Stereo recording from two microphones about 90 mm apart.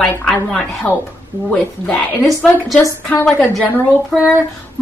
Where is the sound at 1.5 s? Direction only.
15° left (ahead or behind).